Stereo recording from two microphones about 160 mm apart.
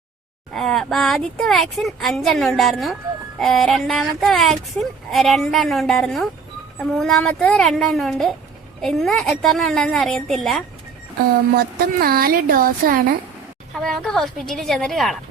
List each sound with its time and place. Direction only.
0.5 s speech: centre (ahead or behind)
11.5 s a woman's voice: 70° right (ahead or behind)
13.7 s speech: centre (ahead or behind)